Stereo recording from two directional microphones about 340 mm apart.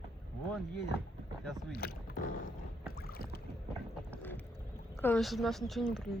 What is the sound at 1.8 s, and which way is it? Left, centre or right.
Speech, left.